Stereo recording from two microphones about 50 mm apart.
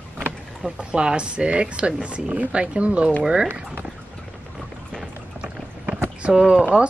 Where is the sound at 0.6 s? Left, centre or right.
Centre.